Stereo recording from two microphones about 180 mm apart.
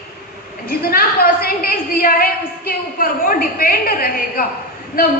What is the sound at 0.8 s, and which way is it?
A woman's voice, 55° left (ahead or behind).